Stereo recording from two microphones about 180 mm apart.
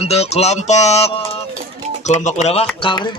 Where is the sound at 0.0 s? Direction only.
35° left (ahead or behind).